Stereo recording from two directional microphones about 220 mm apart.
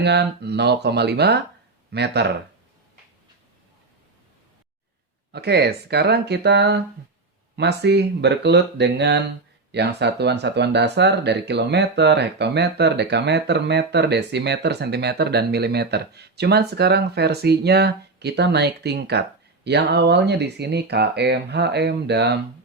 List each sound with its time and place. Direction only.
0.0 s speech: 50° right (ahead or behind)
5.3 s speech: 50° right (ahead or behind)